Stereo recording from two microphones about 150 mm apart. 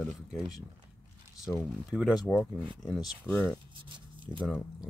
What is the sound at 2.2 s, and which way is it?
Speech, 10° left (ahead or behind).